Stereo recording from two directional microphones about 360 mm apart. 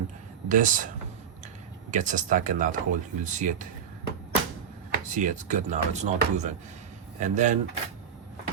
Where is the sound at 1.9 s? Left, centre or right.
Right.